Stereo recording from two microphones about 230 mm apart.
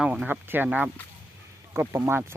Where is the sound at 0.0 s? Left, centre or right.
Centre.